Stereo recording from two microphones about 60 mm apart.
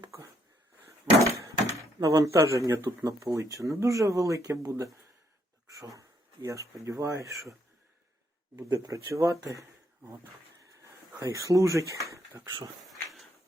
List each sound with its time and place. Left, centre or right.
1.3 s speech: right
5.6 s a sound: right
6.0 s a sound: right
6.8 s speech: right
8.5 s speech: right
11.2 s speech: right
12.9 s dog: centre